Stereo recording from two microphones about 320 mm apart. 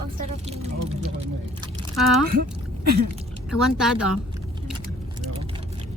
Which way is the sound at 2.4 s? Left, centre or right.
Right.